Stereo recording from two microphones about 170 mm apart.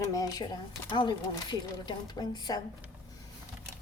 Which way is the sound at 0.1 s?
20° left (ahead or behind).